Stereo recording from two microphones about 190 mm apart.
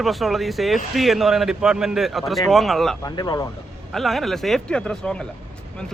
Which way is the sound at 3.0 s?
20° left (ahead or behind).